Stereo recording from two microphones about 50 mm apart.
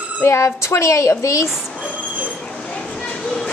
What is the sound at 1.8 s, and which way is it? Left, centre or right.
Train, left.